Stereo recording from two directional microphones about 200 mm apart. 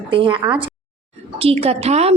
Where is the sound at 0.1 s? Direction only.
25° right (ahead or behind).